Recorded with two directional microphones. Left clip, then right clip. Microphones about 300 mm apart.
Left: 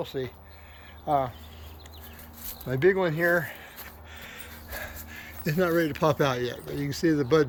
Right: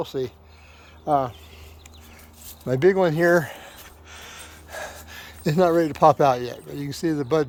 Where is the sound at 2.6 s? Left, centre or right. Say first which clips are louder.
Right 5 dB; right.